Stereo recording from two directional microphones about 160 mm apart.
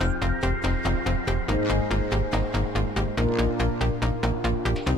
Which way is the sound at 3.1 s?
Centre (ahead or behind).